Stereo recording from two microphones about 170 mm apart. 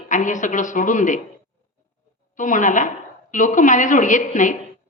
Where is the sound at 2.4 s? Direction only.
50° left (ahead or behind).